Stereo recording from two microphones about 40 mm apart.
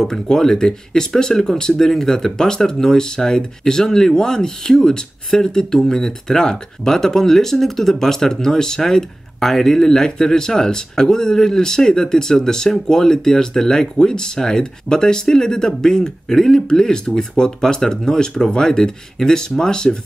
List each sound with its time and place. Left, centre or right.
0.0 s speech: centre